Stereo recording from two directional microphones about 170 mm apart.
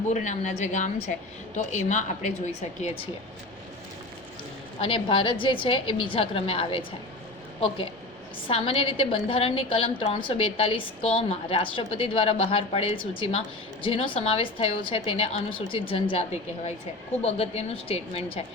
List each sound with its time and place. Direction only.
0.1 s a woman's voice: 45° left (ahead or behind)
4.8 s a woman's voice: 30° left (ahead or behind)
8.4 s a woman's voice: 30° left (ahead or behind)